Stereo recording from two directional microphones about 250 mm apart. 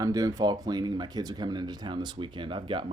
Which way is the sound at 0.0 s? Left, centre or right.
Centre.